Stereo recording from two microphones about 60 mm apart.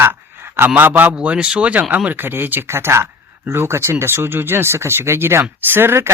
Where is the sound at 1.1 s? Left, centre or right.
Centre; by 2.6 s right.